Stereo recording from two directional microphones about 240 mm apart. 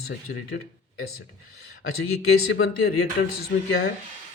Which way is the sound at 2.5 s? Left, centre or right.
Left.